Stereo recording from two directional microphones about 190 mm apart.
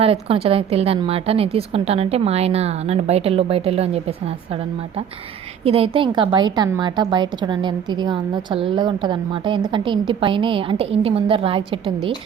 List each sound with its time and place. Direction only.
0.0 s a woman's voice: 30° right (ahead or behind)
5.6 s a woman's voice: 30° right (ahead or behind)